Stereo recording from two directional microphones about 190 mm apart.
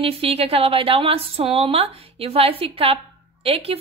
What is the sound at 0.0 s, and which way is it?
A woman's voice, 30° right (ahead or behind).